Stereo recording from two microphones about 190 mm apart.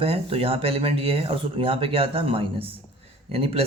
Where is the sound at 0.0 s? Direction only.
30° right (ahead or behind).